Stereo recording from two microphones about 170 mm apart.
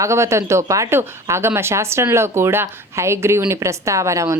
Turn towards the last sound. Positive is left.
turn(degrees=-15)  # may be behind; listen again after turning